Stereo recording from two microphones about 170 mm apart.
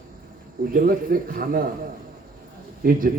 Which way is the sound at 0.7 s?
55° right (ahead or behind).